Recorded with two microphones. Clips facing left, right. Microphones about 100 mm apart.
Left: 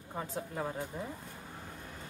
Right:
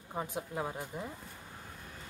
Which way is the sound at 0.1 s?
15° right (ahead or behind).